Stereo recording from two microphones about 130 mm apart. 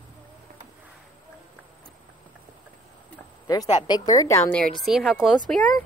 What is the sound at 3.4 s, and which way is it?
A woman's voice, 30° left (ahead or behind).